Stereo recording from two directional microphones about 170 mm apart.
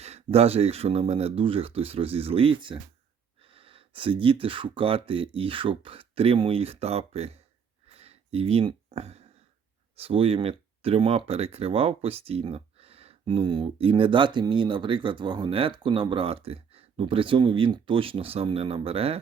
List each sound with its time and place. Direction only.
0.0 s speech: 40° right (ahead or behind)
7.9 s a sound: 35° right (ahead or behind)
9.9 s speech: 35° right (ahead or behind)